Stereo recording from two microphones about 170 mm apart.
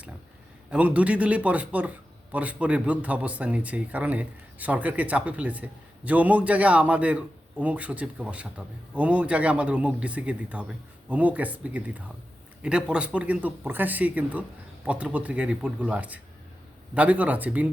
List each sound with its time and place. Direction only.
0.7 s speech: 10° right (ahead or behind)